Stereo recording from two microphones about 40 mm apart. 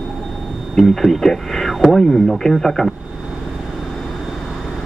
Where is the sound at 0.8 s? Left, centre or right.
Centre.